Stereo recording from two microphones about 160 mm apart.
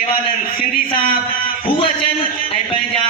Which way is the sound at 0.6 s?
60° left (ahead or behind).